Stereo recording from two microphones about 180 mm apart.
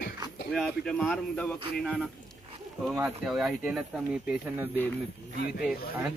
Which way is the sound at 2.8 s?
5° right (ahead or behind).